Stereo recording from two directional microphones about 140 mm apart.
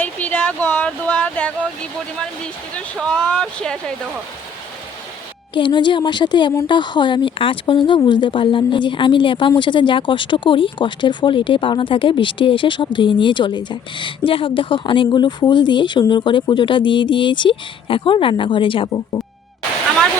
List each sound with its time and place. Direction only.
0.0 s a sound: 10° left (ahead or behind)
2.4 s speech: 5° left (ahead or behind)
5.5 s speech: 35° left (ahead or behind)